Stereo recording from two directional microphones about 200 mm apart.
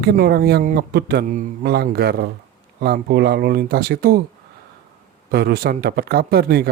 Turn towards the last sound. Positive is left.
turn(degrees=-50)  # may be behind; listen again after turning